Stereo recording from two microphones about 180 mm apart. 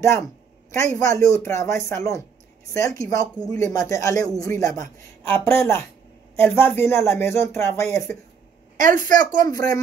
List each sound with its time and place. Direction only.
0.7 s speech: 15° left (ahead or behind)
8.7 s a woman's voice: 45° right (ahead or behind)